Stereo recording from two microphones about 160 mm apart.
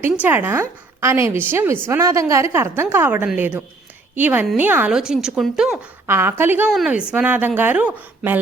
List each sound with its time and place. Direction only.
0.1 s a woman's voice: 10° right (ahead or behind)
6.1 s a woman's voice: 15° right (ahead or behind)